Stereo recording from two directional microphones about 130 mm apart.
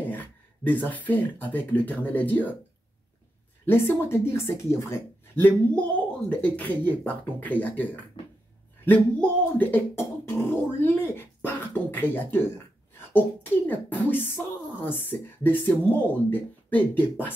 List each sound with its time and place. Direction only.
0.0 s speech: 15° left (ahead or behind)
3.6 s speech: 15° left (ahead or behind)
13.7 s speech: 15° left (ahead or behind)